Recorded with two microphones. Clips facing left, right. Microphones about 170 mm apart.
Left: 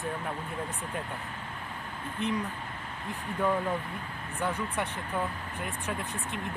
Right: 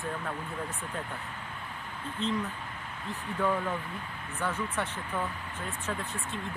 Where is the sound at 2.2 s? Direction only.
15° left (ahead or behind).